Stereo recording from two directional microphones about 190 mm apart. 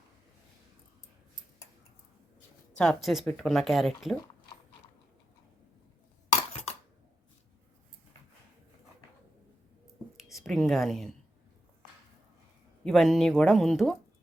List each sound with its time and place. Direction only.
2.7 s speech: 5° left (ahead or behind)
6.3 s a sound: 35° left (ahead or behind)
10.2 s a woman's voice: centre (ahead or behind)
12.8 s speech: centre (ahead or behind)